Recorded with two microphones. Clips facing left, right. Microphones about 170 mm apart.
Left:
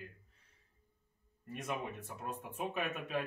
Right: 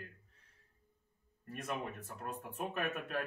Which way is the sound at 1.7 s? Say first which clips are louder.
Even; centre (ahead or behind).